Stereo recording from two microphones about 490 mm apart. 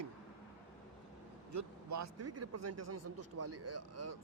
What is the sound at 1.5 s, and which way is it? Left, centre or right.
Speech, right.